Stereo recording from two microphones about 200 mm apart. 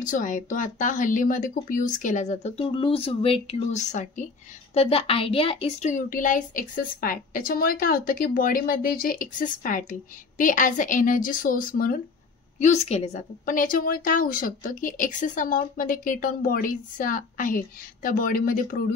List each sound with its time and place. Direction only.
0.0 s a woman's voice: 40° left (ahead or behind)